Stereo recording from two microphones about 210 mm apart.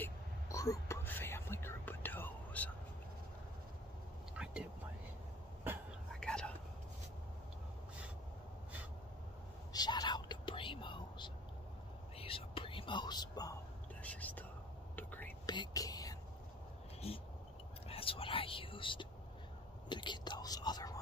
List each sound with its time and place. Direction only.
0.0 s whispering: 15° left (ahead or behind)
4.4 s whispering: 5° right (ahead or behind)
6.1 s whispering: 5° left (ahead or behind)
9.7 s whispering: 20° left (ahead or behind)
14.0 s whispering: 5° left (ahead or behind)
17.8 s whispering: 25° left (ahead or behind)